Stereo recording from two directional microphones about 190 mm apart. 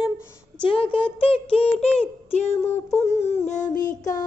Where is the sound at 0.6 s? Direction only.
30° left (ahead or behind).